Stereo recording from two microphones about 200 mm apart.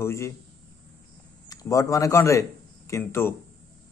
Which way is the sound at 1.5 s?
15° left (ahead or behind).